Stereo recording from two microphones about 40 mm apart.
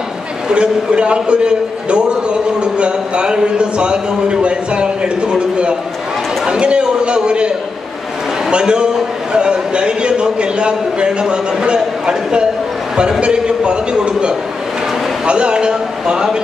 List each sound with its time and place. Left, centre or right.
0.5 s a man's voice: right